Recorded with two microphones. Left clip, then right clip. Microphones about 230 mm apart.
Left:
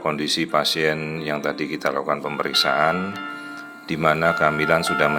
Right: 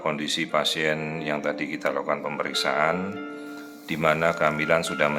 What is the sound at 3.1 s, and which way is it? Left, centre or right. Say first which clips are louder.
Music: left 4 dB; left.